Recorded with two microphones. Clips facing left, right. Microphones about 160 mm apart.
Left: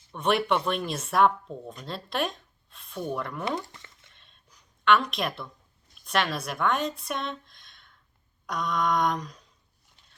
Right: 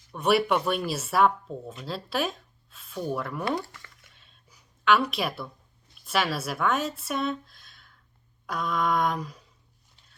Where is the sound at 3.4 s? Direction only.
20° left (ahead or behind).